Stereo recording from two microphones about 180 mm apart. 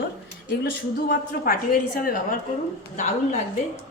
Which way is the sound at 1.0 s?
55° left (ahead or behind).